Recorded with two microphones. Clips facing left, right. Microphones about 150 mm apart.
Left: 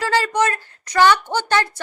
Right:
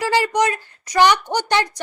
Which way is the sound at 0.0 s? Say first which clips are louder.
Right 1 dB; 15° right (ahead or behind).